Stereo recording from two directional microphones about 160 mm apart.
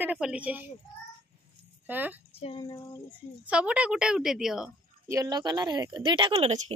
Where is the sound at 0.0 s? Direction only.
5° right (ahead or behind).